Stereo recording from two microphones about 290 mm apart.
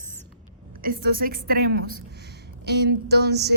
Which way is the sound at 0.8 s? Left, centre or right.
Right.